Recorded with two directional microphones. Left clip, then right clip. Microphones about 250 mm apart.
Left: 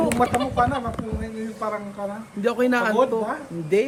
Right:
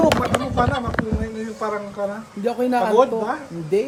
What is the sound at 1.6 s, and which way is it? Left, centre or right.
Speech, right.